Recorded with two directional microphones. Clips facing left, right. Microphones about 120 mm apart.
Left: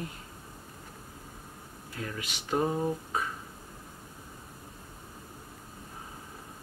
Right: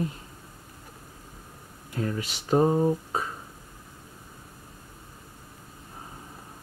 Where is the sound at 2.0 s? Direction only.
35° right (ahead or behind).